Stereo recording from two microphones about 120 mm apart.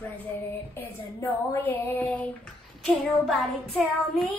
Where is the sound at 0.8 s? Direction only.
20° left (ahead or behind).